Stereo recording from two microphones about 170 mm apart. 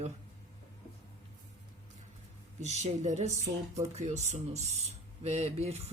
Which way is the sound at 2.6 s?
40° right (ahead or behind).